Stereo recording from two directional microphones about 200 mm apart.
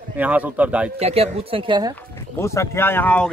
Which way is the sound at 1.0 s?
30° right (ahead or behind).